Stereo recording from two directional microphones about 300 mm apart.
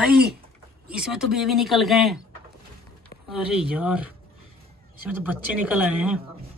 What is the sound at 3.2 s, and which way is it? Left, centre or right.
Speech, centre.